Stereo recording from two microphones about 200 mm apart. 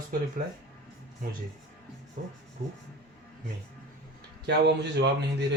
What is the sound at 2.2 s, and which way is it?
Rub, 35° right (ahead or behind).